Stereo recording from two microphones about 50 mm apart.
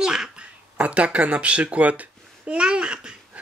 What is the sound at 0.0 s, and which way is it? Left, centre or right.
Speech, centre.